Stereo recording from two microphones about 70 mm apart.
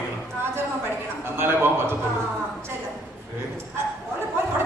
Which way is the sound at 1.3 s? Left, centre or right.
Right.